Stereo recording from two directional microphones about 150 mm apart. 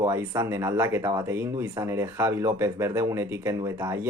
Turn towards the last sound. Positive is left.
turn(degrees=-20)  # may be behind; listen again after turning